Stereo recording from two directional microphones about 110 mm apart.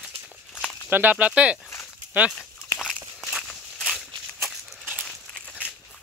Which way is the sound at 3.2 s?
Centre (ahead or behind).